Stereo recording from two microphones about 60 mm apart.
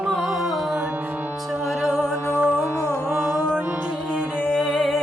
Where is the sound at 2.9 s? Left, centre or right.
Right.